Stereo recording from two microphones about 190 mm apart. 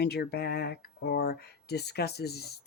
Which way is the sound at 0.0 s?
55° left (ahead or behind).